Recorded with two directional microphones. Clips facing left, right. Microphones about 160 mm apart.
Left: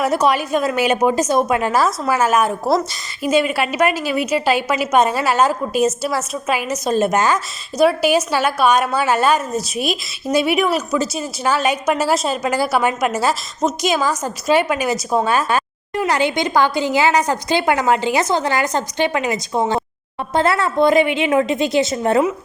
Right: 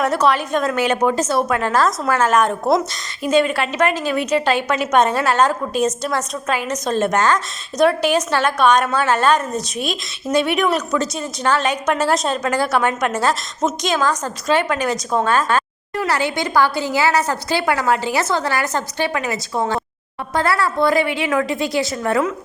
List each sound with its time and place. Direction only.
0.0 s a woman's voice: 10° left (ahead or behind)